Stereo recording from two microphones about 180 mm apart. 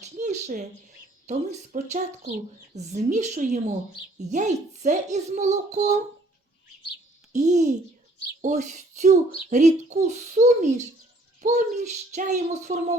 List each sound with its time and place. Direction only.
0.0 s a sound: 40° right (ahead or behind)
1.3 s a woman's voice: 40° right (ahead or behind)
7.3 s a woman's voice: 40° right (ahead or behind)